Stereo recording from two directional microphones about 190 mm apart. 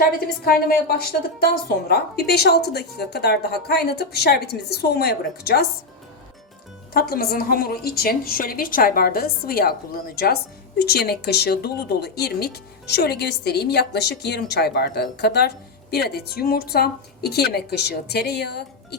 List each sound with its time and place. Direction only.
0.4 s a woman's voice: 50° left (ahead or behind)
6.9 s a woman's voice: 55° left (ahead or behind)